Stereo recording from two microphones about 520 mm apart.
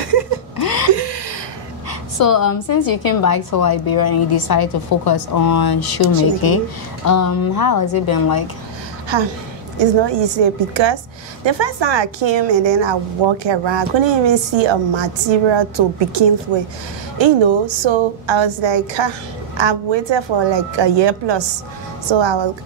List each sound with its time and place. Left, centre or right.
0.9 s a sound: right
2.1 s a woman's voice: left
7.1 s a woman's voice: left
9.1 s a woman's voice: right